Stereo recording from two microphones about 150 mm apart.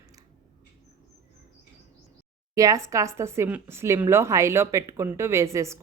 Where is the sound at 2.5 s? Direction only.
20° right (ahead or behind).